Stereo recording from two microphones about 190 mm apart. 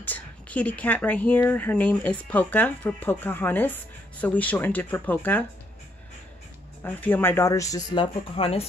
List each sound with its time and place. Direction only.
0.0 s speech: 10° left (ahead or behind)
6.8 s speech: 10° left (ahead or behind); by 8.6 s 30° left (ahead or behind)